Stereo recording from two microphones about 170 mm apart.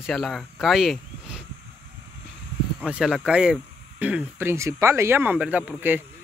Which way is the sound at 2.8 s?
5° right (ahead or behind).